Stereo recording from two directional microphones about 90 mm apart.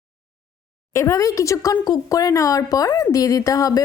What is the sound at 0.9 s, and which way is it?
Speech, 35° left (ahead or behind).